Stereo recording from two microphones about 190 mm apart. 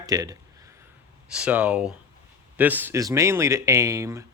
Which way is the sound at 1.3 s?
5° right (ahead or behind).